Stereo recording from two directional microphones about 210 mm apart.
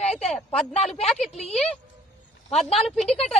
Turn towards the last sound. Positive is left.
turn(degrees=30)  # may be behind; listen again after turning